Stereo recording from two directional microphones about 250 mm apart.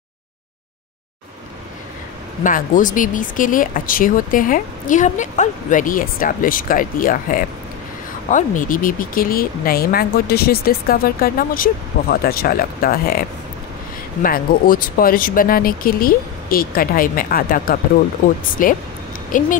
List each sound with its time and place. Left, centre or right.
2.4 s speech: left
14.2 s speech: left